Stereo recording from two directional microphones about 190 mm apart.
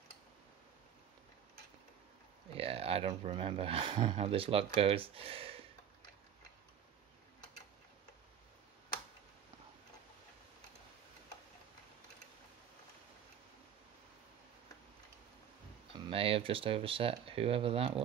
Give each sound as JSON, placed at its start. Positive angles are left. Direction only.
{"t": 2.5, "sound": "speech", "side_deg": -30}
{"t": 15.9, "sound": "speech", "side_deg": -30}